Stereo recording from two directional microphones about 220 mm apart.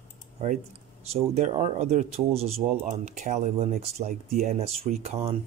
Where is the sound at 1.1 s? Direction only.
30° right (ahead or behind).